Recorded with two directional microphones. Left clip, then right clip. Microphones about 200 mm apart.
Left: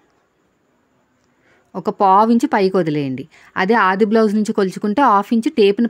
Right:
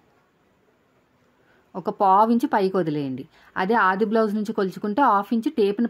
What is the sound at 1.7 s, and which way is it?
A woman's voice, 35° left (ahead or behind).